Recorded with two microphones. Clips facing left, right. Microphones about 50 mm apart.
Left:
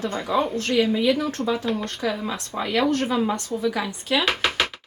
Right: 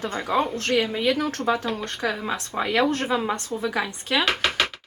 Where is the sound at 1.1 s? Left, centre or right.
Right.